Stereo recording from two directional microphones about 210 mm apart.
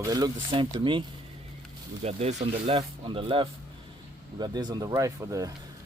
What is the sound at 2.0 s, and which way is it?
Speech, 30° right (ahead or behind).